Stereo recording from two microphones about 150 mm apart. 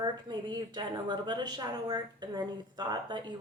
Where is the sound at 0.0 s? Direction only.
30° right (ahead or behind).